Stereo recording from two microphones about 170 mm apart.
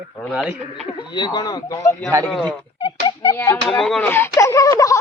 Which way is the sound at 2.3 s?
Centre (ahead or behind).